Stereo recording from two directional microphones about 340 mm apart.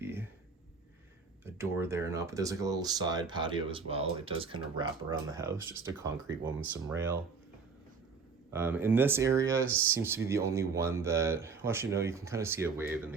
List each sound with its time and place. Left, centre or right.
0.0 s a sound: centre
1.5 s speech: centre
8.5 s speech: centre